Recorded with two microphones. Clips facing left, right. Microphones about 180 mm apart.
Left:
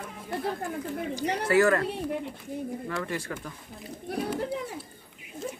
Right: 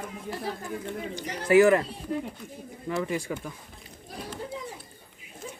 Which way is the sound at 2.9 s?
15° right (ahead or behind).